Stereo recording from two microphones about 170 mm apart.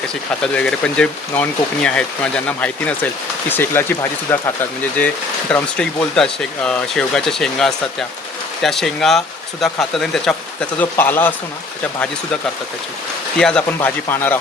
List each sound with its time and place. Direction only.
0.1 s speech: 5° left (ahead or behind)
5.5 s speech: 5° left (ahead or behind)
13.4 s speech: 5° left (ahead or behind)